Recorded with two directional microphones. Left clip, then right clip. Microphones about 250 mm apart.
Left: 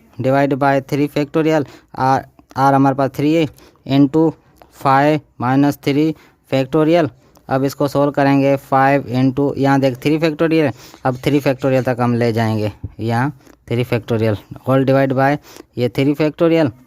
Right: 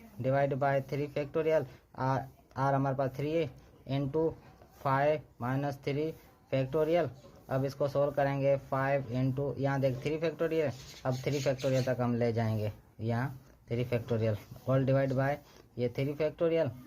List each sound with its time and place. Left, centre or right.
0.2 s speech: left